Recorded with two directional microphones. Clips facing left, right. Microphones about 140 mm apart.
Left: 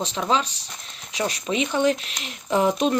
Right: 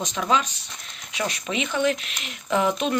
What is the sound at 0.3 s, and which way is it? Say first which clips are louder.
Speech: right 1 dB; 30° left (ahead or behind).